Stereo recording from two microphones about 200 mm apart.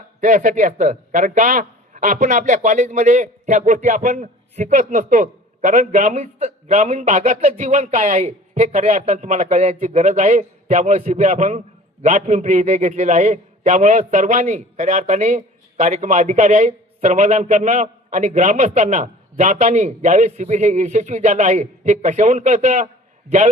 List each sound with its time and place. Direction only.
0.2 s a man's voice: 40° right (ahead or behind)